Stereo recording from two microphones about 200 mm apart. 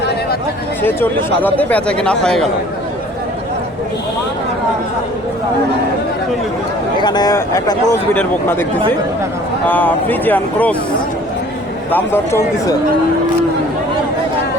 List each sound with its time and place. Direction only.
0.8 s speech: 10° left (ahead or behind)
6.9 s speech: 20° left (ahead or behind)
9.6 s speech: 10° left (ahead or behind)
11.9 s speech: 10° left (ahead or behind)